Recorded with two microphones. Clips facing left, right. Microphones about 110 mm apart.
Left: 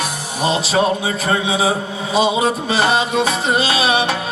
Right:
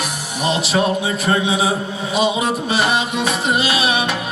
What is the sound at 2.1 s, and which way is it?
Music, 30° left (ahead or behind).